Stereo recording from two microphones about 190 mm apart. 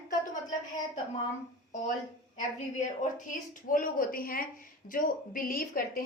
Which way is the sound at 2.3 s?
40° left (ahead or behind).